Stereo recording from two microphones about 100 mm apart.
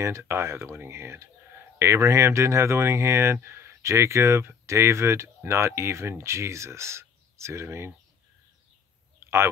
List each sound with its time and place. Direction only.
0.0 s speech: 25° right (ahead or behind)